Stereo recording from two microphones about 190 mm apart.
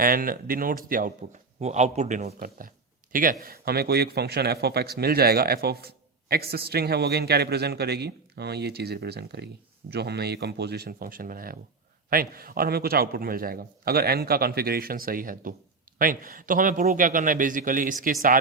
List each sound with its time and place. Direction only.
0.0 s a man's voice: 50° right (ahead or behind)